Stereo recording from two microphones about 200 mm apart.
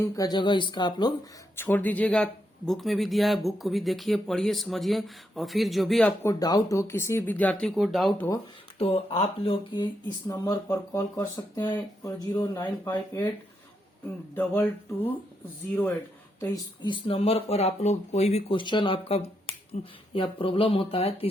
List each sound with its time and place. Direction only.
0.0 s speech: 20° left (ahead or behind)
1.5 s speech: 10° left (ahead or behind)
6.4 s speech: 15° left (ahead or behind); by 8.3 s centre (ahead or behind)
8.8 s speech: 30° left (ahead or behind)
14.3 s speech: 10° left (ahead or behind)
16.8 s speech: 25° left (ahead or behind)